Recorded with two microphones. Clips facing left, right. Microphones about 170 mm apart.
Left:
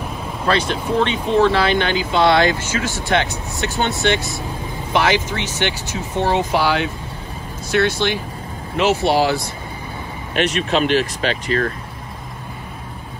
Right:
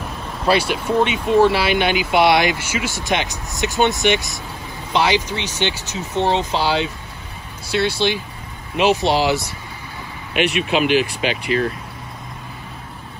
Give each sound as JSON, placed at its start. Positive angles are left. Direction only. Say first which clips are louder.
{"t": 0.5, "sound": "speech", "louder": "right 1 dB", "side_deg": -10}
{"t": 10.4, "sound": "speech", "louder": "even", "side_deg": -5}